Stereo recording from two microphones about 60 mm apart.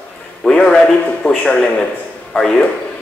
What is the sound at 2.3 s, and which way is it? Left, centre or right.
Speech, centre.